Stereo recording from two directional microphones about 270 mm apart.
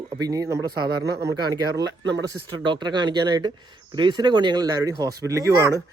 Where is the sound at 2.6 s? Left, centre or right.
Centre.